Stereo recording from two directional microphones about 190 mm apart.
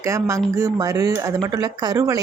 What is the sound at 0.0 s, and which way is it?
Speech, 15° right (ahead or behind).